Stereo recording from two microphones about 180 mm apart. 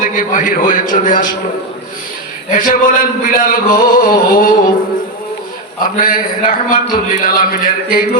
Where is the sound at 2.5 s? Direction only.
50° left (ahead or behind).